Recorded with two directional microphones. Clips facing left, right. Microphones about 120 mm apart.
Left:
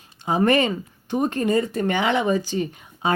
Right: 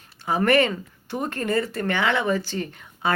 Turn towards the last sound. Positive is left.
turn(degrees=15)  # may be behind; listen again after turning